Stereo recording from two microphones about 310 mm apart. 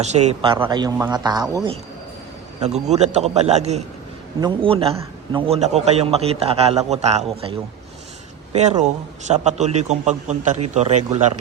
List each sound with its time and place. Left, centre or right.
0.0 s a man's voice: right
8.5 s a man's voice: right